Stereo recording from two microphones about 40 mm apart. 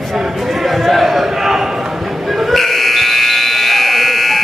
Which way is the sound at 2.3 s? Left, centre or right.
Centre.